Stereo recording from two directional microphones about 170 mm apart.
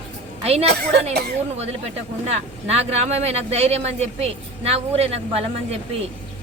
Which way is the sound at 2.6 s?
40° right (ahead or behind).